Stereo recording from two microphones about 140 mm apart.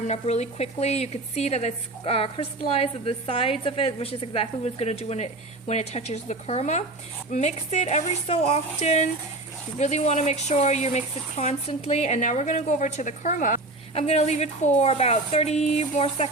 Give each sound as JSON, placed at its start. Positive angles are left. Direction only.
{"t": 0.1, "sound": "speech", "side_deg": 50}
{"t": 13.9, "sound": "speech", "side_deg": 50}